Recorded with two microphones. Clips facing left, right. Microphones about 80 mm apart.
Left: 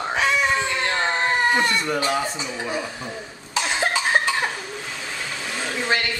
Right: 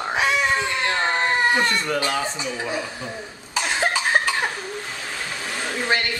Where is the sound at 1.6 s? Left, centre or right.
Centre.